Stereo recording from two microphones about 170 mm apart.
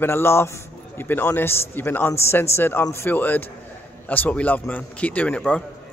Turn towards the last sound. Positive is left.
turn(degrees=5)  # may be behind; listen again after turning